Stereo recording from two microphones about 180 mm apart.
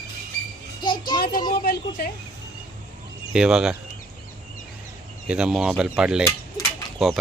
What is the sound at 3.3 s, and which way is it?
Speech, 5° right (ahead or behind).